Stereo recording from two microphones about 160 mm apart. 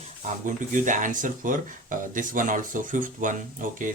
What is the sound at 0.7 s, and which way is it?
Speech, 55° right (ahead or behind).